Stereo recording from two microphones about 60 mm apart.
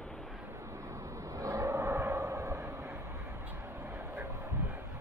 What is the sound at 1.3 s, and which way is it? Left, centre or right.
Vehicle, right.